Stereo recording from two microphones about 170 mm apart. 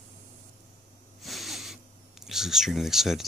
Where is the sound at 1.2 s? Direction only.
Centre (ahead or behind).